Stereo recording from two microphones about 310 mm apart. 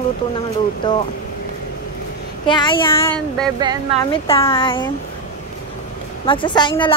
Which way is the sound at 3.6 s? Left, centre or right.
Centre.